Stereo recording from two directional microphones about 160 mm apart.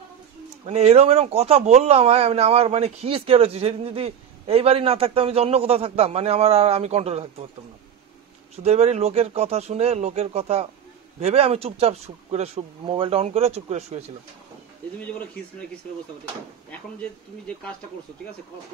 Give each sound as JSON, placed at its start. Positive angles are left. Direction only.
{"t": 0.7, "sound": "a man's voice", "side_deg": -45}
{"t": 8.6, "sound": "a man's voice", "side_deg": -40}